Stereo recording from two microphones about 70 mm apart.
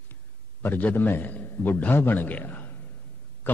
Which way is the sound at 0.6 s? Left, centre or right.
Left.